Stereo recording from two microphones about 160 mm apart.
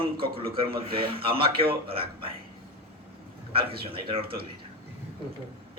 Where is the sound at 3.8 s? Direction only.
35° right (ahead or behind).